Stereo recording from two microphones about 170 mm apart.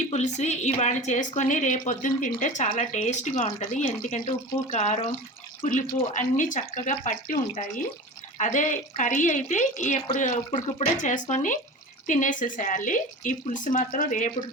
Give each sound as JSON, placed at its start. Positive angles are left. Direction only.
{"t": 0.1, "sound": "speech", "side_deg": 40}